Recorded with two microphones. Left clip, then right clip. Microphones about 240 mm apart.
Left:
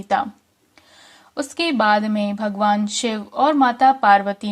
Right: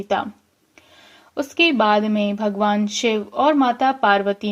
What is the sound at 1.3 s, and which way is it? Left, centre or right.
A woman's voice, left.